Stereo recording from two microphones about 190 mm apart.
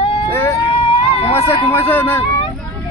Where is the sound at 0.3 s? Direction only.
15° left (ahead or behind).